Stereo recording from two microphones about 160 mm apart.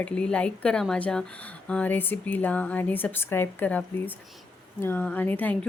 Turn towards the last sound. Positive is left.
turn(degrees=10)  # may be behind; listen again after turning